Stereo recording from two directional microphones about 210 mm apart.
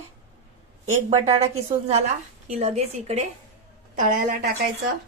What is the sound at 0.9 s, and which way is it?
A woman's voice, 30° right (ahead or behind).